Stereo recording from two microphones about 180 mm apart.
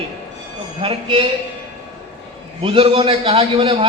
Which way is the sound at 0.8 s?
30° right (ahead or behind).